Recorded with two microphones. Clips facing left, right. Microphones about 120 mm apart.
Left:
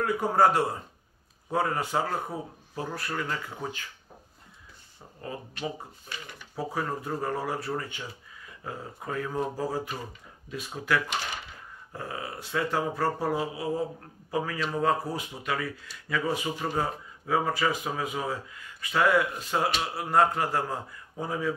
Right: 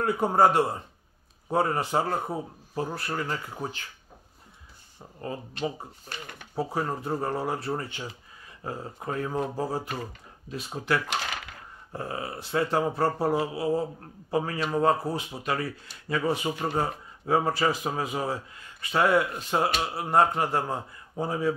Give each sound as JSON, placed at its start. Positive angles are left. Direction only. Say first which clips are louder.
{"t": 0.0, "sound": "speech", "louder": "right 1 dB", "side_deg": -25}
{"t": 5.2, "sound": "speech", "louder": "right 3 dB", "side_deg": -35}